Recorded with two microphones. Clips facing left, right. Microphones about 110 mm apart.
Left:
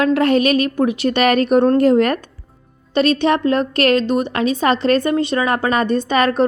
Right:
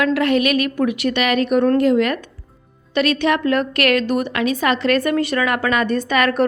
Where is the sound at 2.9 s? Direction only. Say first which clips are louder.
Left 2 dB; 30° left (ahead or behind).